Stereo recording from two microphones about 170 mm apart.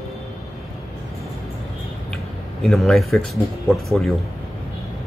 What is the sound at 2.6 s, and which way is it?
Speech, centre (ahead or behind).